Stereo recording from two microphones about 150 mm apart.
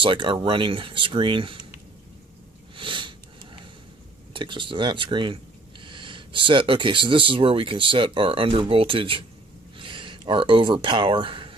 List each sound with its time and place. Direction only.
0.0 s speech: 35° right (ahead or behind)
2.7 s sniff: 35° right (ahead or behind)
4.3 s speech: 35° right (ahead or behind)